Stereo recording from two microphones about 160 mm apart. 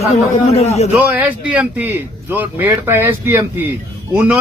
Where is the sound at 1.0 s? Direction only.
10° right (ahead or behind).